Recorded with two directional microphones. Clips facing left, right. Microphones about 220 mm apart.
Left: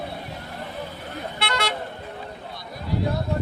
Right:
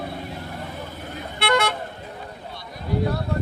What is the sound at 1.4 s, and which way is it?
Vehicle, 50° right (ahead or behind).